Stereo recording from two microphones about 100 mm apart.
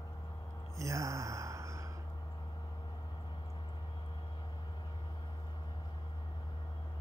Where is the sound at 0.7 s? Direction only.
30° right (ahead or behind).